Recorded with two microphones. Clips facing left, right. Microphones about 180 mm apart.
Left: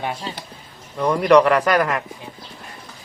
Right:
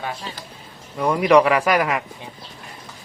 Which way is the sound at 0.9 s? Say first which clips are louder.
Left 1 dB; 5° right (ahead or behind).